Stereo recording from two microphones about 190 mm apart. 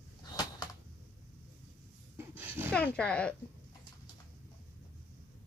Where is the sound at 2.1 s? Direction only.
10° right (ahead or behind).